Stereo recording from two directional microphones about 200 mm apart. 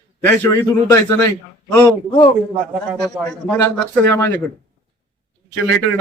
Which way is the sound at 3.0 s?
Centre (ahead or behind).